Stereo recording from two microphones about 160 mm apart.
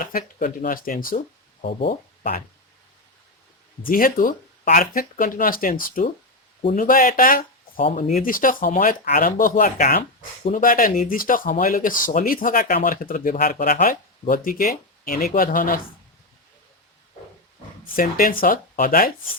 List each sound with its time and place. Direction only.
0.0 s speech: 60° left (ahead or behind)
3.8 s speech: 60° left (ahead or behind)
7.9 s speech: 45° left (ahead or behind)
8.2 s speech: 60° left (ahead or behind)
17.9 s speech: 65° left (ahead or behind)